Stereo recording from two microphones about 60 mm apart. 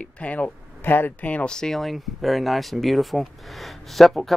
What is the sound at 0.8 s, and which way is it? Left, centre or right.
Speech, left.